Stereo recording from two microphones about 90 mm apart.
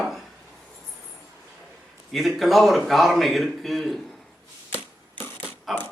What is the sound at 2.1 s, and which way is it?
A man's voice, centre (ahead or behind).